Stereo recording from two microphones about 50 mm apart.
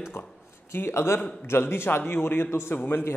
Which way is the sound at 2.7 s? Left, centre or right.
Left.